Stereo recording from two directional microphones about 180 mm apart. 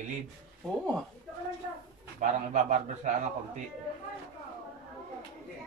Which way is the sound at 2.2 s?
40° right (ahead or behind).